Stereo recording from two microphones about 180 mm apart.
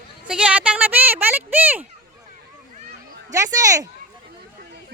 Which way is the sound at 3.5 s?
20° right (ahead or behind).